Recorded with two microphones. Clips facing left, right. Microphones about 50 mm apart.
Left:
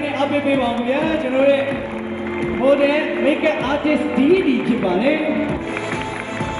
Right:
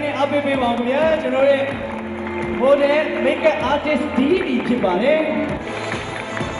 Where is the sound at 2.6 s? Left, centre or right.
Left.